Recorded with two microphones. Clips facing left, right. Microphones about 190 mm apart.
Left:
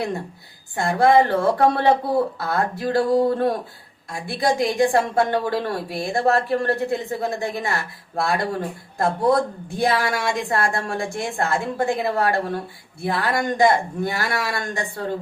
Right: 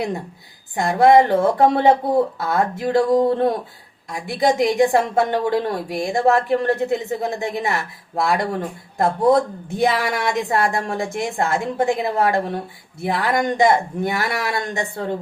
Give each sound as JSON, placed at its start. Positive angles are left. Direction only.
{"t": 0.8, "sound": "a woman's voice", "side_deg": -20}